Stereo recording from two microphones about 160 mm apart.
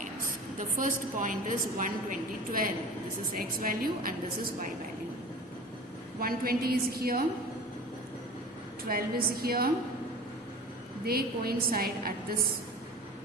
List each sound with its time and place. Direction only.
0.8 s a woman's voice: 55° right (ahead or behind)
6.1 s a woman's voice: 70° right (ahead or behind)
8.9 s a woman's voice: 70° right (ahead or behind)
11.0 s a woman's voice: 70° right (ahead or behind)